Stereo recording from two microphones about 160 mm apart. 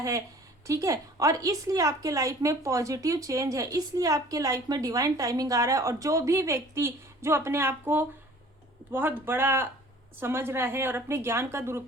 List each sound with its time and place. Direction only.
0.7 s a woman's voice: 20° right (ahead or behind)